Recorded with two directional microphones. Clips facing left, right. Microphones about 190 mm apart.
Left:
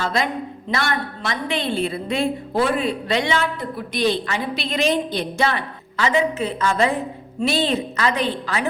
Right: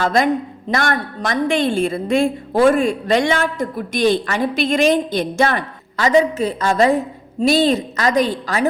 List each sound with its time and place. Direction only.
0.0 s a woman's voice: 45° right (ahead or behind)